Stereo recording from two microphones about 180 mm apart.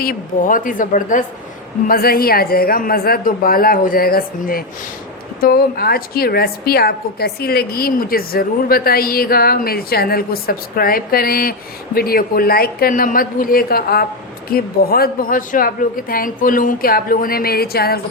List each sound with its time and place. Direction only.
0.0 s a woman's voice: 50° left (ahead or behind)